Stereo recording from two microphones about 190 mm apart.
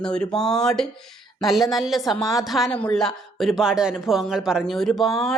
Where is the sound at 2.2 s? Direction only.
15° left (ahead or behind).